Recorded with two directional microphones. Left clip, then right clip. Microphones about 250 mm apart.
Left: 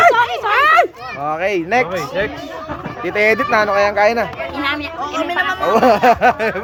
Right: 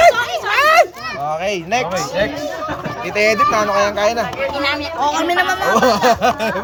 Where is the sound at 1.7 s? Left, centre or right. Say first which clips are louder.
Left 1 dB; left.